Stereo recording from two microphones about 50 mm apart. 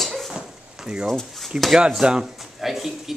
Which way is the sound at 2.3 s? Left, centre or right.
Centre.